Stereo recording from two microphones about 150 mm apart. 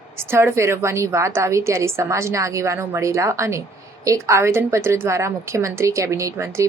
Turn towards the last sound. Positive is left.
turn(degrees=-20)  # may be behind; listen again after turning